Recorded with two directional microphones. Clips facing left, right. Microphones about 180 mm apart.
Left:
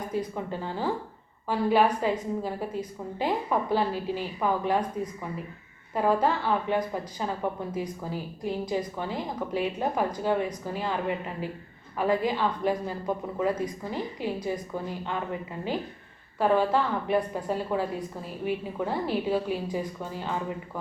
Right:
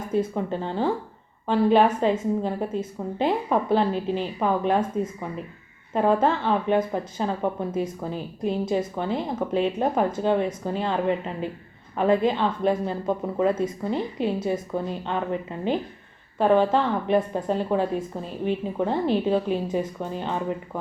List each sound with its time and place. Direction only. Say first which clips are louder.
0.1 s a woman's voice: right 9 dB; 20° right (ahead or behind)
5.9 s a woman's voice: right 4 dB; 20° right (ahead or behind)
11.9 s a woman's voice: right 5 dB; 25° right (ahead or behind)